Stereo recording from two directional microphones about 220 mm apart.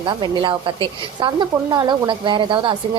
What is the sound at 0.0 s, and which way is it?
Speech, 20° right (ahead or behind).